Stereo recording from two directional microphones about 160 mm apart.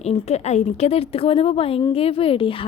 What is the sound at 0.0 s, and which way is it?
A woman's voice, 40° left (ahead or behind).